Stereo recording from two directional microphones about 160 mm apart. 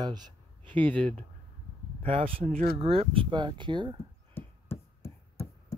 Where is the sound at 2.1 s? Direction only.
35° right (ahead or behind).